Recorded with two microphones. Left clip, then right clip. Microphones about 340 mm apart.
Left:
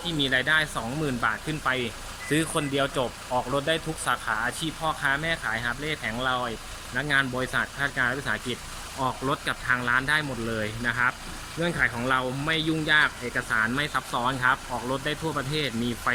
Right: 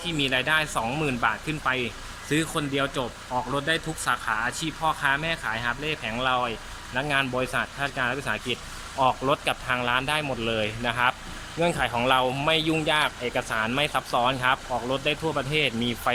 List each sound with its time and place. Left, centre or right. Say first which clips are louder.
0.0 s speech: even; centre